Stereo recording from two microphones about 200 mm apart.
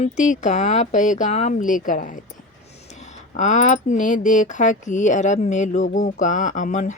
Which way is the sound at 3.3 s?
35° left (ahead or behind).